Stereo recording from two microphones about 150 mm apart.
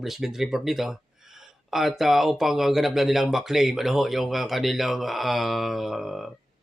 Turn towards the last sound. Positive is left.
turn(degrees=0)  # may be behind; listen again after turning